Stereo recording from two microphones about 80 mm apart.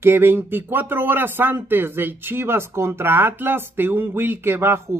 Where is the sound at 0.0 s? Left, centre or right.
Right.